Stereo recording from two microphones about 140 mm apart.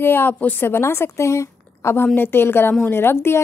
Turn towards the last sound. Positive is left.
turn(degrees=15)  # may be behind; listen again after turning